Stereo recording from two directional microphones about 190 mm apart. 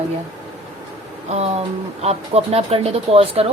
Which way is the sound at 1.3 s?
35° right (ahead or behind).